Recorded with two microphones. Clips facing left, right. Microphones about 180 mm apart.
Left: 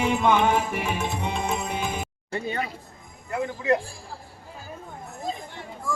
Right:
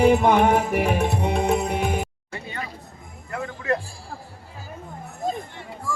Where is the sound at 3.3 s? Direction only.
20° left (ahead or behind).